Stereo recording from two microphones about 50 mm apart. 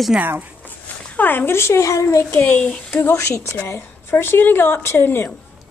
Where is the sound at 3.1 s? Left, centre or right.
Left.